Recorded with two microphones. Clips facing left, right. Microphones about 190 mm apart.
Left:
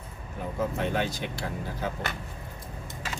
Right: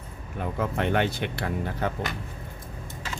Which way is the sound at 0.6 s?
65° right (ahead or behind).